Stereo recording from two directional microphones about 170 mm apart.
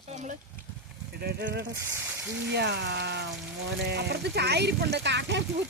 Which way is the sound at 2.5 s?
90° right.